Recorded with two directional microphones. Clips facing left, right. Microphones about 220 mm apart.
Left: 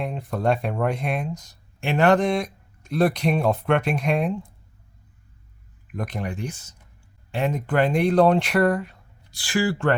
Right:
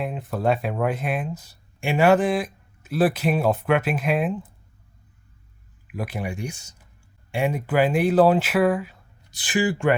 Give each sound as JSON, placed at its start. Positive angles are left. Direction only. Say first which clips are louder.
{"t": 0.0, "sound": "speech", "louder": "even", "side_deg": 0}
{"t": 5.9, "sound": "speech", "louder": "even", "side_deg": -5}
{"t": 9.3, "sound": "speech", "louder": "even", "side_deg": -20}